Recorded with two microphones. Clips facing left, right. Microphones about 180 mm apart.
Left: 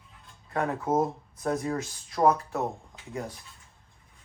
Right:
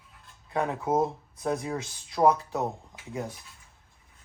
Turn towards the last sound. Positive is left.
turn(degrees=-5)  # may be behind; listen again after turning